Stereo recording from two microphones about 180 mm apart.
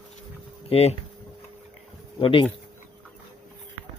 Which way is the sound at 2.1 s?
30° left (ahead or behind).